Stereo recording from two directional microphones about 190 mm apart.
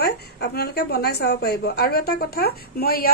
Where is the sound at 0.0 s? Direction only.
55° left (ahead or behind).